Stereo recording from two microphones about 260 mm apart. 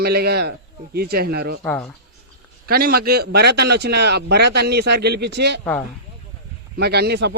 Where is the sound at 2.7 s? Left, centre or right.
Right.